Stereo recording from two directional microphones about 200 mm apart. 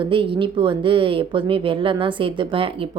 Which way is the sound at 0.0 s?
25° right (ahead or behind).